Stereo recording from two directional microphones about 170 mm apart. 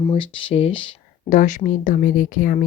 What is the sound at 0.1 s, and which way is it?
Speech, 30° left (ahead or behind).